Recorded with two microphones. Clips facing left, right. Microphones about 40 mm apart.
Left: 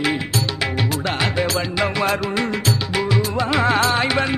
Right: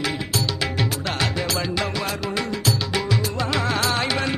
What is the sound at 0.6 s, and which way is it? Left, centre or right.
Music, left.